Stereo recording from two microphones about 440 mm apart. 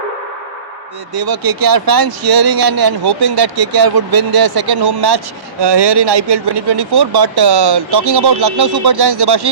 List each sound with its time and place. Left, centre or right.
1.1 s speech: right